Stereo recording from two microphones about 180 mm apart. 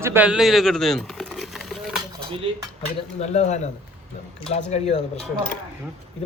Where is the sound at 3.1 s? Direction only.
40° left (ahead or behind).